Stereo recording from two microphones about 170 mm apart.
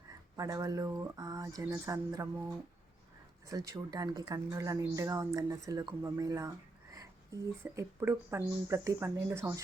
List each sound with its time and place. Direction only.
0.3 s speech: 20° right (ahead or behind)
3.5 s speech: 20° right (ahead or behind)
7.6 s speech: 15° right (ahead or behind)